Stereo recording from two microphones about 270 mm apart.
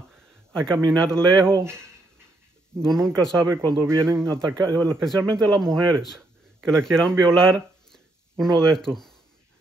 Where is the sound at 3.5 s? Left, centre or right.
Centre.